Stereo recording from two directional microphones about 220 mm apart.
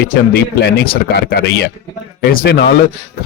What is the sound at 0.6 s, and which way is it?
Speech, 50° left (ahead or behind).